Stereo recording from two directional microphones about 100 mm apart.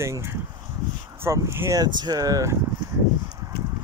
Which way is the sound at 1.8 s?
40° right (ahead or behind).